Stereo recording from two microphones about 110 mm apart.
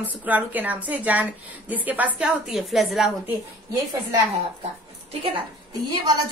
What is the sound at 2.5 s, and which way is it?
Speech, centre (ahead or behind).